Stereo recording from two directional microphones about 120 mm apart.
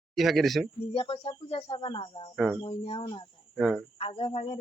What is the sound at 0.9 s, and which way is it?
Speech, 50° left (ahead or behind).